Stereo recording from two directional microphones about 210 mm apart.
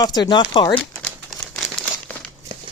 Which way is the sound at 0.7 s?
5° left (ahead or behind).